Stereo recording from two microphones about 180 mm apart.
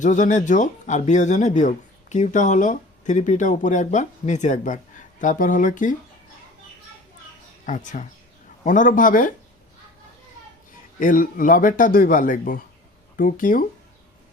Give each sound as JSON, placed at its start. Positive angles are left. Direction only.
{"t": 0.0, "sound": "speech", "side_deg": 45}
{"t": 7.6, "sound": "speech", "side_deg": 45}
{"t": 11.0, "sound": "speech", "side_deg": 50}